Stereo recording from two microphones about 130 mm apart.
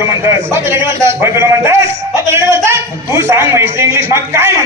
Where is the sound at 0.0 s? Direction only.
20° right (ahead or behind).